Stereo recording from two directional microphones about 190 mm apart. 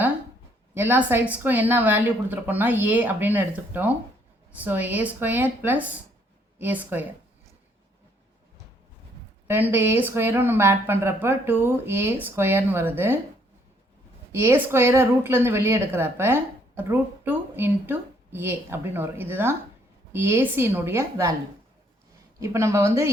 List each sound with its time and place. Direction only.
0.7 s a woman's voice: 10° right (ahead or behind)
9.5 s a woman's voice: 10° right (ahead or behind)
14.3 s a woman's voice: 15° right (ahead or behind)
22.4 s a woman's voice: 15° right (ahead or behind)